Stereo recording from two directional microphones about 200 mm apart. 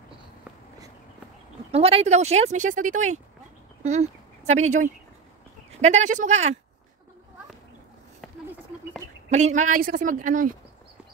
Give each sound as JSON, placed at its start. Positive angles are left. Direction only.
{"t": 1.7, "sound": "speech", "side_deg": -30}
{"t": 9.3, "sound": "speech", "side_deg": -35}